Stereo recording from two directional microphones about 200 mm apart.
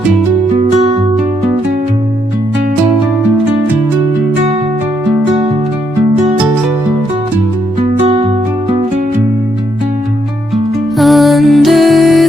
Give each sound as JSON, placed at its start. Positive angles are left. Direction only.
{"t": 8.0, "sound": "music", "side_deg": -30}
{"t": 10.5, "sound": "music", "side_deg": 0}